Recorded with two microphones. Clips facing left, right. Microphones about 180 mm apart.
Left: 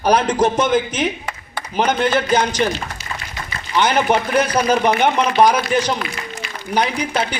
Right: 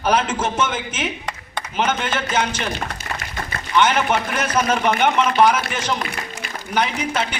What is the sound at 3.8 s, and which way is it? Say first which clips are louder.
A man's voice: left 2 dB; 35° left (ahead or behind).